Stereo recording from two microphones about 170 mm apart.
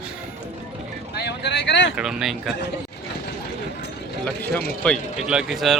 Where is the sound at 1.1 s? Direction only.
75° left (ahead or behind).